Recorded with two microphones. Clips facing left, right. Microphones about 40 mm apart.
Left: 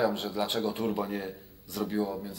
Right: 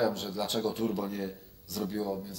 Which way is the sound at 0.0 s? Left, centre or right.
Left.